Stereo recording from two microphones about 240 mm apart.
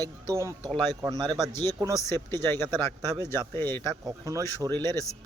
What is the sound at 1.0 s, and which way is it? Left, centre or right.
Speech, centre.